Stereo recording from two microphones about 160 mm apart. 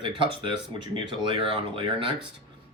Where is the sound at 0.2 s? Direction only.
30° right (ahead or behind).